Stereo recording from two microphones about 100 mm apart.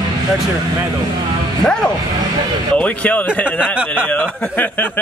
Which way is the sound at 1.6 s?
10° left (ahead or behind).